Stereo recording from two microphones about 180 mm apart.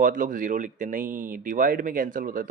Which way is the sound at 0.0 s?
45° right (ahead or behind).